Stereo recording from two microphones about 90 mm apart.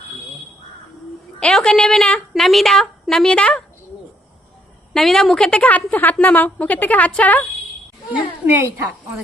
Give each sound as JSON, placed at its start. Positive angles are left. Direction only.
{"t": 1.4, "sound": "a woman's voice", "side_deg": 5}
{"t": 4.9, "sound": "a woman's voice", "side_deg": 5}
{"t": 8.1, "sound": "a woman's voice", "side_deg": -20}